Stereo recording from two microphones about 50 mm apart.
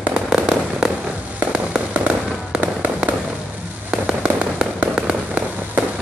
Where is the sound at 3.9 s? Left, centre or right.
Right.